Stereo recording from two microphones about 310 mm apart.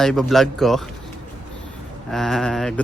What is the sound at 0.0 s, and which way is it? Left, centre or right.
Speech, centre.